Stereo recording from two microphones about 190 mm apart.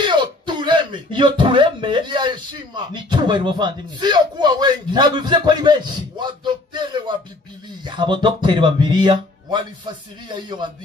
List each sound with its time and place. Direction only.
0.0 s speech: 25° right (ahead or behind)